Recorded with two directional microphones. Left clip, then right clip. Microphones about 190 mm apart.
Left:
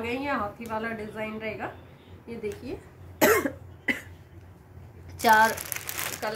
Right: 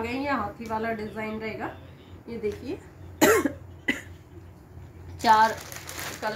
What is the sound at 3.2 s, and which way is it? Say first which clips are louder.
Cough: right 1 dB; centre (ahead or behind).